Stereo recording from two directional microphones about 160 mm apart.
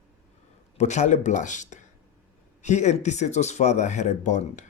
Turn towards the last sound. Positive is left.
turn(degrees=50)  # may be behind; listen again after turning